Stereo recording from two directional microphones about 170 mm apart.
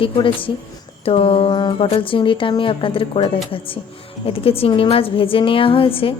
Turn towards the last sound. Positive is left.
turn(degrees=35)  # may be behind; listen again after turning